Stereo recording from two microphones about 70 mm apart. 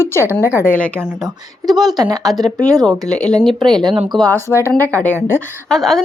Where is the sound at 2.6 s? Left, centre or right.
Centre.